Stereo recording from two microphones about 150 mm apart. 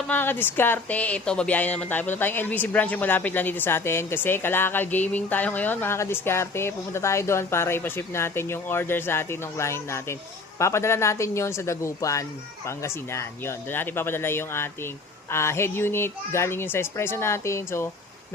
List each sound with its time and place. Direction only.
0.1 s a man's voice: 15° left (ahead or behind)